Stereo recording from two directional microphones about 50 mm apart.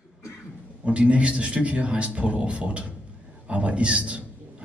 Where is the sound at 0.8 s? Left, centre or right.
Right.